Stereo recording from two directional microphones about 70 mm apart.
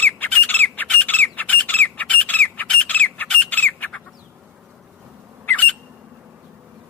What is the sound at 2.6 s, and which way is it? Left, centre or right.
Bird, centre.